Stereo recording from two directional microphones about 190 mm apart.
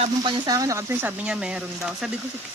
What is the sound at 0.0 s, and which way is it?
Speech, 25° right (ahead or behind).